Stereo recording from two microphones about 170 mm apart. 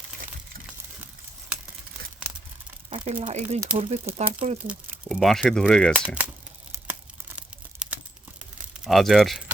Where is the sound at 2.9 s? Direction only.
45° right (ahead or behind).